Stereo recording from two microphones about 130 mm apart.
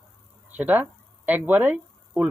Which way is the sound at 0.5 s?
15° right (ahead or behind).